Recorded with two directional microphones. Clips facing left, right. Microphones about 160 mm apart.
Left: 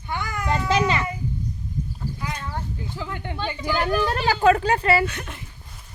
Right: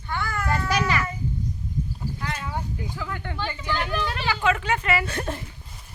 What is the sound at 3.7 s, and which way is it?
Speech, 40° left (ahead or behind).